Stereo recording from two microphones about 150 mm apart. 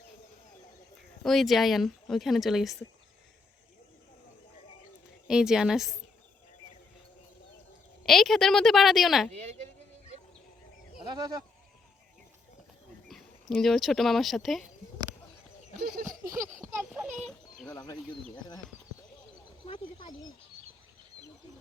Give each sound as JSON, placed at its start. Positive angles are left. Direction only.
{"t": 1.2, "sound": "speech", "side_deg": 0}
{"t": 5.3, "sound": "speech", "side_deg": -5}
{"t": 8.0, "sound": "speech", "side_deg": 0}
{"t": 9.3, "sound": "a woman's voice", "side_deg": -45}
{"t": 11.1, "sound": "speech", "side_deg": -25}
{"t": 13.1, "sound": "speech", "side_deg": 0}
{"t": 15.8, "sound": "a sound", "side_deg": -70}
{"t": 17.2, "sound": "a sound", "side_deg": 0}
{"t": 19.6, "sound": "a sound", "side_deg": 35}